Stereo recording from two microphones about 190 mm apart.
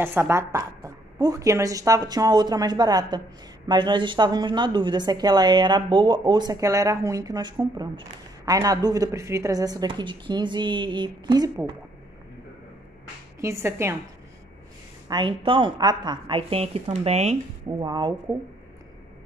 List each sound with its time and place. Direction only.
0.0 s a woman's voice: 10° right (ahead or behind)
13.4 s a woman's voice: 15° right (ahead or behind)
15.0 s a woman's voice: 25° right (ahead or behind)
17.6 s a woman's voice: 20° right (ahead or behind)